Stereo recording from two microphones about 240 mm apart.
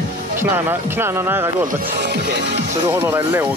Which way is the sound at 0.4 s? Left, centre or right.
Centre.